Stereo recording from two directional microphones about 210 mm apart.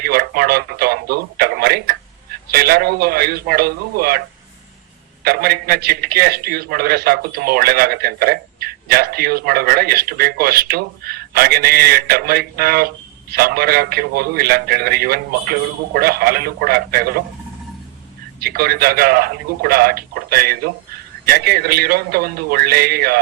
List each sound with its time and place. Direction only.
0.0 s radio: 45° right (ahead or behind)
2.5 s a man's voice: 50° right (ahead or behind)
5.2 s a man's voice: 50° right (ahead or behind)
18.3 s a man's voice: 45° right (ahead or behind)